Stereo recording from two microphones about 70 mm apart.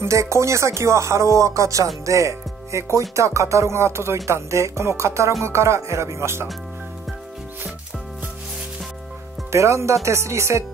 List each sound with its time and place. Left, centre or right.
0.0 s speech: right
9.5 s speech: right